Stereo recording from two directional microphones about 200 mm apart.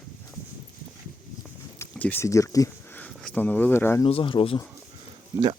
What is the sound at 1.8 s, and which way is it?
Speech, 10° left (ahead or behind).